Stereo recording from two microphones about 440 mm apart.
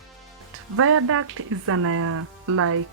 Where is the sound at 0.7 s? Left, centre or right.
Right.